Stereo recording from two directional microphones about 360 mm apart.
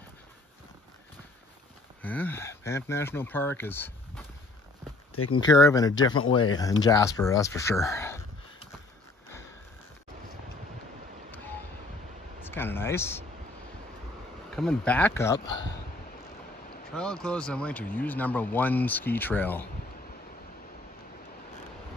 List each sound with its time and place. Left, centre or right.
2.0 s speech: centre
5.1 s speech: left
5.5 s speech: centre
11.3 s a sound: centre
12.4 s speech: centre
14.5 s speech: centre
16.9 s speech: centre